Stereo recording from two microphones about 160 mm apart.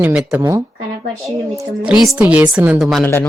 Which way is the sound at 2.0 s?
5° right (ahead or behind).